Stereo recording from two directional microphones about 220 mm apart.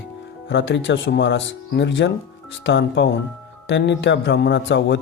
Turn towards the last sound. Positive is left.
turn(degrees=55)  # may be behind; listen again after turning